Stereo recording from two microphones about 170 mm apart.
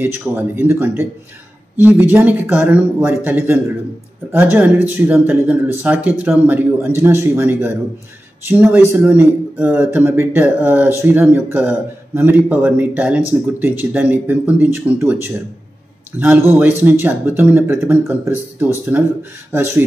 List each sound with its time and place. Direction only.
0.0 s speech: 15° right (ahead or behind)
16.2 s speech: 10° right (ahead or behind)